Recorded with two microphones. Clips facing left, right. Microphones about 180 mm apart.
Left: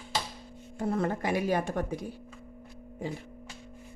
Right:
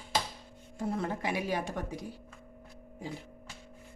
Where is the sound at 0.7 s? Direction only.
50° left (ahead or behind).